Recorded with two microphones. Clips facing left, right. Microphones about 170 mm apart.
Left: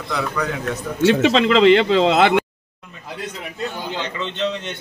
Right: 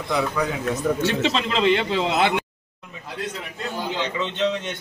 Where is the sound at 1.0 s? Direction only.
80° left.